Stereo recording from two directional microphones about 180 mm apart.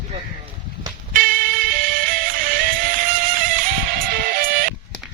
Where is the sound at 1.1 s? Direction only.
50° right (ahead or behind).